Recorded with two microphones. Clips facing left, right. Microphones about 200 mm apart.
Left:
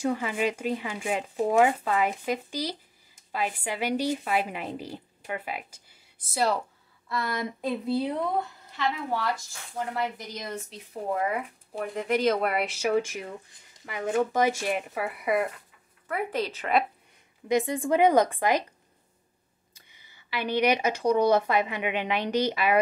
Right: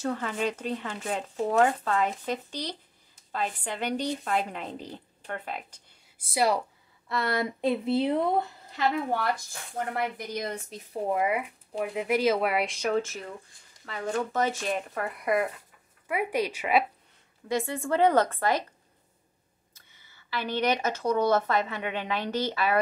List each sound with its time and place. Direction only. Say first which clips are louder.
0.0 s speech: left 2 dB; 10° left (ahead or behind)
6.2 s speech: right 1 dB; 10° right (ahead or behind)
7.6 s speech: right 2 dB; 25° right (ahead or behind)
8.7 s a woman's voice: right 2 dB; 50° right (ahead or behind)
11.1 s speech: right 2 dB; 15° right (ahead or behind); by 15.5 s centre (ahead or behind)
16.1 s speech: right 1 dB; 10° right (ahead or behind)
17.5 s speech: left 4 dB; 15° left (ahead or behind)
19.7 s speech: left 2 dB; 15° left (ahead or behind)